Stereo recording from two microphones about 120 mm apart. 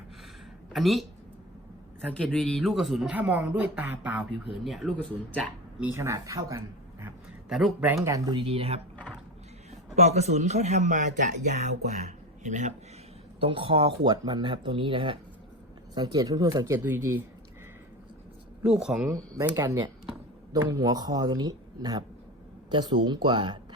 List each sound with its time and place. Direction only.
0.7 s speech: centre (ahead or behind)
2.1 s speech: 5° left (ahead or behind)
3.2 s speech: 10° right (ahead or behind)
4.5 s speech: centre (ahead or behind)
4.9 s speech: 10° left (ahead or behind)
5.8 s speech: 20° right (ahead or behind)
8.0 s speech: 30° right (ahead or behind)
8.4 s speech: 50° right (ahead or behind)
9.9 s speech: 65° right (ahead or behind)
13.4 s speech: 45° right (ahead or behind)
16.0 s speech: 35° right (ahead or behind)
18.6 s speech: 5° right (ahead or behind)
19.5 s speech: 30° right (ahead or behind)